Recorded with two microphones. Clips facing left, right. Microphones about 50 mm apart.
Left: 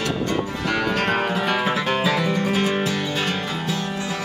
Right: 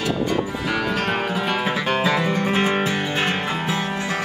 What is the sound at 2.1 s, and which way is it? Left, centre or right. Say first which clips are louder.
Music: right 1 dB; centre.